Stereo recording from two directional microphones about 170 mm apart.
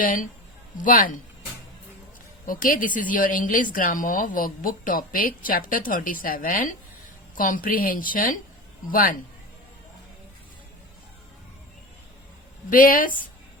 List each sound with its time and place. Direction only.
0.0 s a woman's voice: 50° left (ahead or behind)
2.5 s a woman's voice: 55° left (ahead or behind)
12.7 s a woman's voice: 55° left (ahead or behind)